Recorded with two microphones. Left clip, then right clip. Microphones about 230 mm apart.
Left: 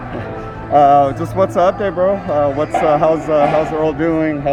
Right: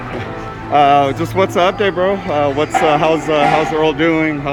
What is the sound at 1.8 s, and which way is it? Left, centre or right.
Speech, right.